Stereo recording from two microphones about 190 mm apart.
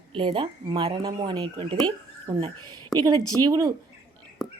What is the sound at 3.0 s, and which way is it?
Speech, 20° right (ahead or behind).